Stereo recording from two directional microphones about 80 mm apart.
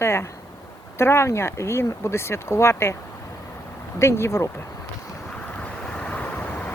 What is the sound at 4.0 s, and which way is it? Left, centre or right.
Speech, left.